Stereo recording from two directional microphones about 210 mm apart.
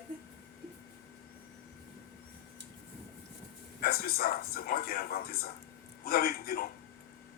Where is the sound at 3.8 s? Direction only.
45° left (ahead or behind).